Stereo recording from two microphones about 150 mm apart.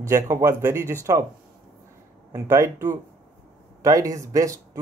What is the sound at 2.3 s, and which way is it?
Speech, 20° right (ahead or behind).